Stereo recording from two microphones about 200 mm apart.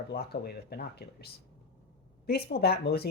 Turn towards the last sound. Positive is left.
turn(degrees=50)  # may be behind; listen again after turning